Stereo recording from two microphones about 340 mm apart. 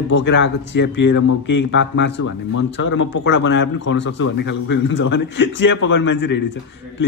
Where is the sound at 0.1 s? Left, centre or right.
Left.